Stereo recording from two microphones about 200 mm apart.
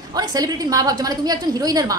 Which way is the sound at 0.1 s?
20° right (ahead or behind).